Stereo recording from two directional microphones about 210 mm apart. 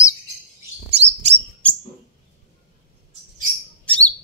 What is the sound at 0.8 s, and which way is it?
Bird, 30° right (ahead or behind).